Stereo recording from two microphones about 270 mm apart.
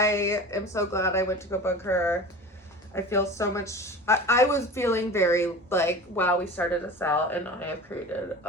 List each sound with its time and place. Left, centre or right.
0.0 s speech: centre